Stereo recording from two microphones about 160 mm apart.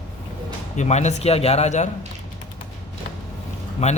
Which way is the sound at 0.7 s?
45° left (ahead or behind).